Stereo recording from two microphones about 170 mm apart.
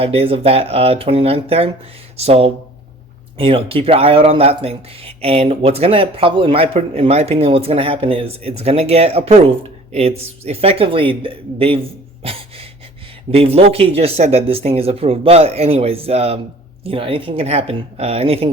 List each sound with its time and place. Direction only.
0.0 s speech: 35° right (ahead or behind)
12.2 s a sound: 35° right (ahead or behind)
13.3 s speech: 35° right (ahead or behind)